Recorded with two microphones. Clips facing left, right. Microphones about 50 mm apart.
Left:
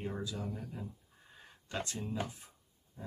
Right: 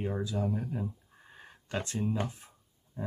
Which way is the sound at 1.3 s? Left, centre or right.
Right.